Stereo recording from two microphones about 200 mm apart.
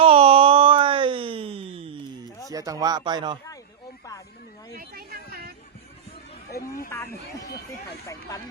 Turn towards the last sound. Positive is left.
turn(degrees=15)  # may be behind; listen again after turning